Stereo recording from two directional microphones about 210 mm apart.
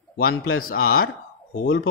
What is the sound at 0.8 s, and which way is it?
Speech, 80° left.